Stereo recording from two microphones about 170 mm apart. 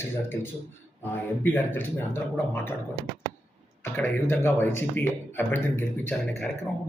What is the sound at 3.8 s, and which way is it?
Speech, 15° left (ahead or behind).